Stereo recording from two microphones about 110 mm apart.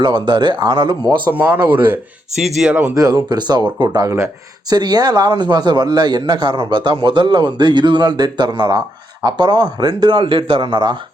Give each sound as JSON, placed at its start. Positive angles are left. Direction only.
{"t": 0.0, "sound": "speech", "side_deg": -45}
{"t": 1.3, "sound": "speech", "side_deg": -20}
{"t": 2.9, "sound": "a man's voice", "side_deg": -35}